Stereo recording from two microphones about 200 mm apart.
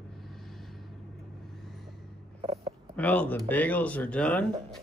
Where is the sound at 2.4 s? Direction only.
30° right (ahead or behind).